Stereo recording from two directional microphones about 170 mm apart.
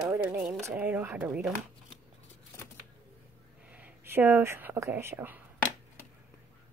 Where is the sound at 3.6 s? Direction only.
10° right (ahead or behind).